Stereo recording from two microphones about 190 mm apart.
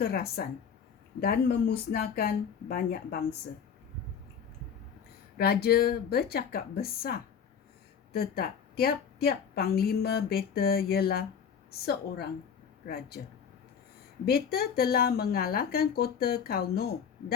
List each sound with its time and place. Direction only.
0.0 s a woman's voice: 55° left (ahead or behind)
5.4 s a woman's voice: 55° left (ahead or behind)
14.3 s a woman's voice: 55° left (ahead or behind)